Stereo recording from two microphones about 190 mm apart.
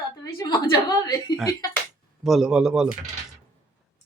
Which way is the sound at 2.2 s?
Centre (ahead or behind).